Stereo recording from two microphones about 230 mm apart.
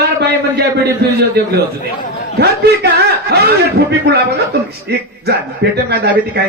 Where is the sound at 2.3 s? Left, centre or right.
Right.